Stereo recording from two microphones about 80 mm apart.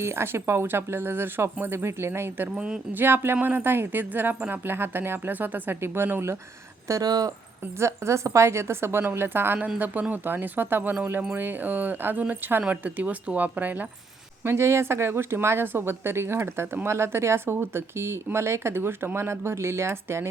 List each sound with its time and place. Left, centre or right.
0.0 s speech: right
2.6 s speech: centre
2.9 s speech: right
6.8 s speech: right
7.8 s speech: right
14.4 s speech: right